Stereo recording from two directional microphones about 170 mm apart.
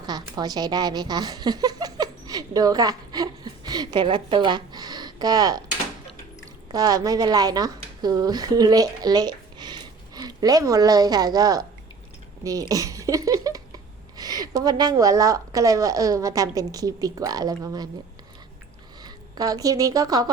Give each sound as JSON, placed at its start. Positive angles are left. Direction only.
{"t": 0.0, "sound": "speech", "side_deg": -25}
{"t": 6.7, "sound": "a woman's voice", "side_deg": -20}
{"t": 19.0, "sound": "a woman's voice", "side_deg": -20}